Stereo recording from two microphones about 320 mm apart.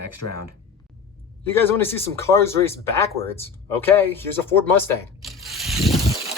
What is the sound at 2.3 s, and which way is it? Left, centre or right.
Speech, centre.